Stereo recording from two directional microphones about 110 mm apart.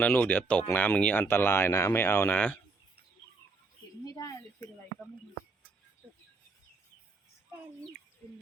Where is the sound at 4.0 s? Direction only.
35° left (ahead or behind).